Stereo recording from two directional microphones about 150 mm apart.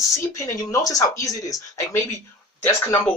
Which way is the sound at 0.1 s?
20° left (ahead or behind).